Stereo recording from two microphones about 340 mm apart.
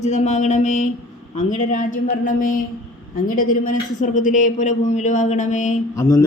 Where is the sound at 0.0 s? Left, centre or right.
Left.